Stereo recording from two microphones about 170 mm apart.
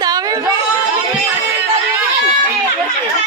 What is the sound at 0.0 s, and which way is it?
Chatter, 20° right (ahead or behind).